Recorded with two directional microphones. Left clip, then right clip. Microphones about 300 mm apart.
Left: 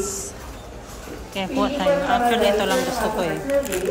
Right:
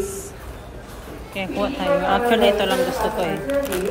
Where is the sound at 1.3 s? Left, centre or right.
Centre.